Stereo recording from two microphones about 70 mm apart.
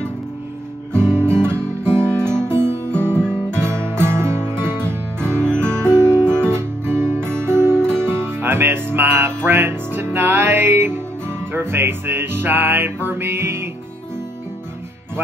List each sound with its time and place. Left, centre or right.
1.1 s guitar: centre
1.5 s music: right
3.2 s music: centre
3.6 s music: right
4.8 s music: centre
5.6 s music: right
6.2 s music: centre
6.5 s music: right
7.7 s music: centre
8.4 s music: right